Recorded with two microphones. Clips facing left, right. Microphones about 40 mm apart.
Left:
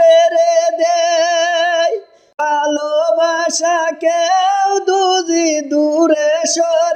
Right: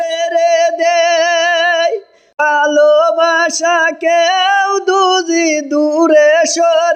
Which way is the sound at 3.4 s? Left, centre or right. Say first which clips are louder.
Right 3 dB; right.